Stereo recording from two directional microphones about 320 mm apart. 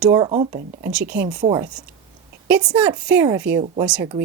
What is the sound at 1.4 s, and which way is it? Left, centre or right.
Speech, centre.